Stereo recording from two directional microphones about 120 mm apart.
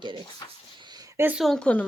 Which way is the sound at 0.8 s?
35° right (ahead or behind).